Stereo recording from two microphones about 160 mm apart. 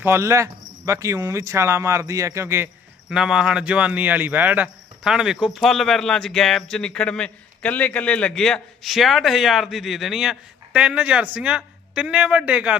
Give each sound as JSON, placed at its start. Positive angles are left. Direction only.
{"t": 0.0, "sound": "speech", "side_deg": -15}
{"t": 3.1, "sound": "speech", "side_deg": -5}